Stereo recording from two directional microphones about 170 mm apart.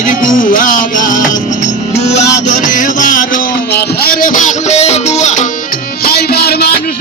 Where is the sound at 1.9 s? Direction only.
40° left (ahead or behind).